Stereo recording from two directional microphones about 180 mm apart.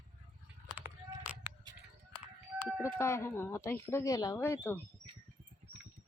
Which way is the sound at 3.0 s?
15° left (ahead or behind).